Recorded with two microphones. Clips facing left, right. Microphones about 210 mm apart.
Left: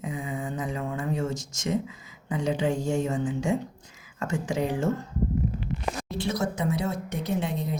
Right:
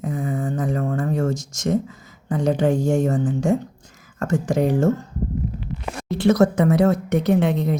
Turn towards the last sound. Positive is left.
turn(degrees=-70)  # may be behind; listen again after turning